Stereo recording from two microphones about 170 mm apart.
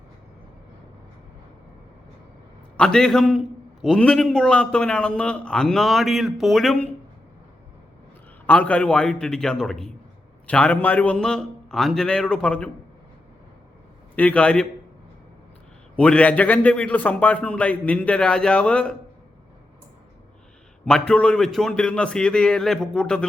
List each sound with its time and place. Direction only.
2.7 s a man's voice: 5° left (ahead or behind)
8.4 s a man's voice: 10° left (ahead or behind)
14.2 s a man's voice: 5° left (ahead or behind)
16.0 s a man's voice: 5° left (ahead or behind)
20.8 s a man's voice: 5° left (ahead or behind)